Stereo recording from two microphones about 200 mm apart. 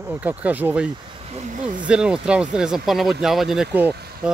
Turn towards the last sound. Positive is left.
turn(degrees=-10)  # may be behind; listen again after turning